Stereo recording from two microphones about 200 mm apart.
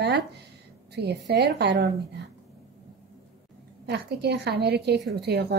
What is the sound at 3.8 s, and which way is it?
A woman's voice, 55° right (ahead or behind).